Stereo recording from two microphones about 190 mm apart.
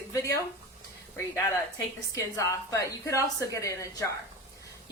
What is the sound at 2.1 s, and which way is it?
A woman's voice, 15° left (ahead or behind).